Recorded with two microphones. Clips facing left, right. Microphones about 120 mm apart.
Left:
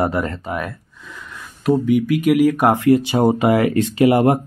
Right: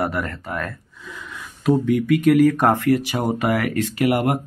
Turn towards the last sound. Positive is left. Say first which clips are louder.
# left 5 dB
turn(degrees=25)  # may be behind; listen again after turning